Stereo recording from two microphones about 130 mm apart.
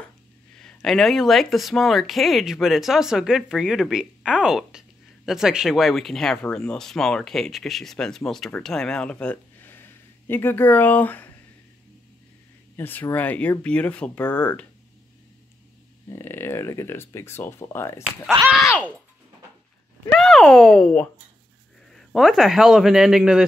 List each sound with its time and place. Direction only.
0.6 s speech: 5° left (ahead or behind)
12.7 s speech: 15° left (ahead or behind)
16.1 s speech: 20° left (ahead or behind)
18.4 s speech: 50° right (ahead or behind)
20.1 s speech: 5° left (ahead or behind)